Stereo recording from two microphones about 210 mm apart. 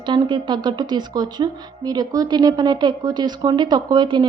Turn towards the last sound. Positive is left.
turn(degrees=-20)  # may be behind; listen again after turning